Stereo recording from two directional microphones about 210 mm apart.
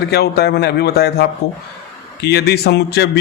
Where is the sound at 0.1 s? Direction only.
50° left (ahead or behind).